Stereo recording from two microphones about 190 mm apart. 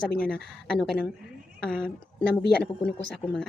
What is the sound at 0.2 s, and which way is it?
Speech, 5° left (ahead or behind).